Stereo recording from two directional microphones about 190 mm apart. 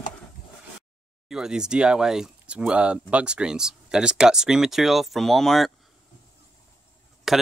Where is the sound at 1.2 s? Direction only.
5° right (ahead or behind).